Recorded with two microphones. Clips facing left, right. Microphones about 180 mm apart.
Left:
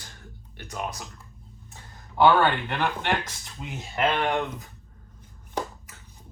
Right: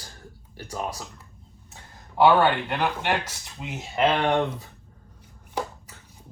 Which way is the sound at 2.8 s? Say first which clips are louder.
Even; 5° right (ahead or behind).